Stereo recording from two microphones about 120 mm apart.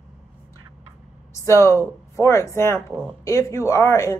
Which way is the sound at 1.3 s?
25° left (ahead or behind).